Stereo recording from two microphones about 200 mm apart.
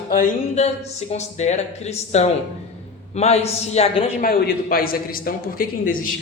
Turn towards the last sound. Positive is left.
turn(degrees=45)  # may be behind; listen again after turning